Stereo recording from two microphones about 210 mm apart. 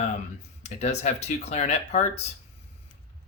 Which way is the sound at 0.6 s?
30° left (ahead or behind).